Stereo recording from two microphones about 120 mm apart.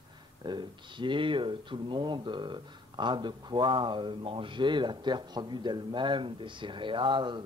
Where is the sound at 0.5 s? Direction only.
40° right (ahead or behind).